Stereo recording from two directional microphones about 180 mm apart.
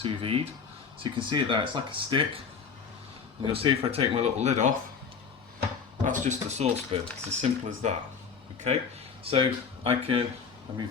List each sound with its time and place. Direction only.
0.0 s speech: 30° right (ahead or behind)
3.4 s speech: 30° right (ahead or behind)
6.1 s speech: 45° right (ahead or behind)
9.2 s speech: 30° right (ahead or behind)